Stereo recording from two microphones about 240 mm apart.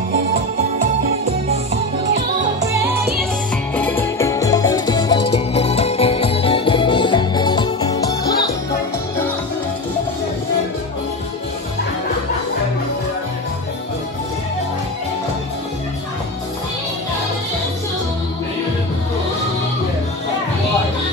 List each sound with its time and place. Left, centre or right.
2.6 s music: centre
3.7 s music: centre